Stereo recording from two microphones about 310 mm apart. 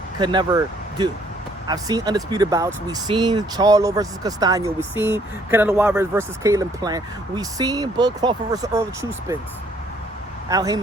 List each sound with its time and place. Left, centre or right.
0.2 s speech: centre
10.5 s speech: centre